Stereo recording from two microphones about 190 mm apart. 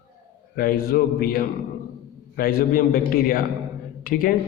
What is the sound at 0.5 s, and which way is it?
A man's voice, 50° left (ahead or behind).